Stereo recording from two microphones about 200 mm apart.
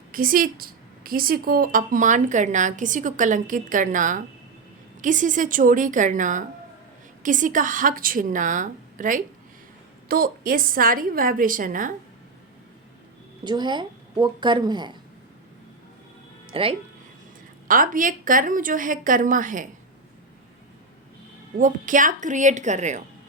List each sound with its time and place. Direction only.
0.1 s a woman's voice: 45° right (ahead or behind)
13.4 s a woman's voice: 20° right (ahead or behind)
16.5 s speech: 30° right (ahead or behind)
17.7 s a woman's voice: 45° right (ahead or behind)
21.6 s a woman's voice: 40° right (ahead or behind)